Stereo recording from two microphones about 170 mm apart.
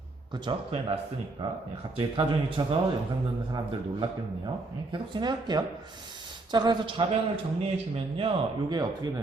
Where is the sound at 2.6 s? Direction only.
25° right (ahead or behind).